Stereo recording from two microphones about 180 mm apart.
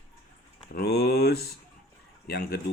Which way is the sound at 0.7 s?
60° left (ahead or behind).